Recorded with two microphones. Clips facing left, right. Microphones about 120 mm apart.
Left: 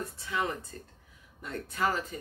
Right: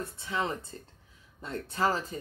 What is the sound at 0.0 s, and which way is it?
Speech, 25° right (ahead or behind).